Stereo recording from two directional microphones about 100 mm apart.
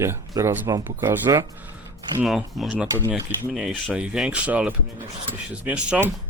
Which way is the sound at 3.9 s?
10° right (ahead or behind).